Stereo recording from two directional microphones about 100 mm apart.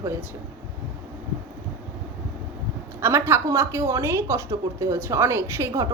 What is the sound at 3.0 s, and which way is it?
Speech, 25° right (ahead or behind).